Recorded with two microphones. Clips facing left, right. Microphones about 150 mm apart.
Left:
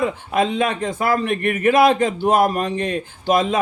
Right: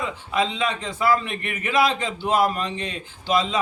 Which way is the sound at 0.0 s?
50° left (ahead or behind).